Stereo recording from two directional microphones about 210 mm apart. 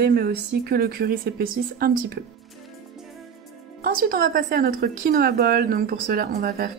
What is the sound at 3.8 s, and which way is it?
Speech, 45° right (ahead or behind).